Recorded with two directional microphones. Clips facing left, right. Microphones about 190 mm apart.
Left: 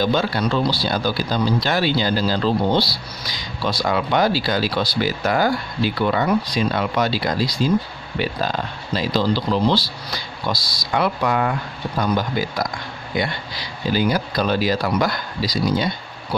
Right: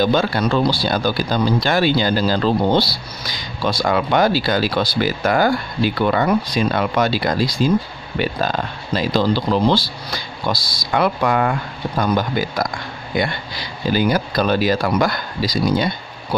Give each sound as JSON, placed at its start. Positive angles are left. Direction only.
{"t": 0.0, "sound": "speech", "side_deg": -50}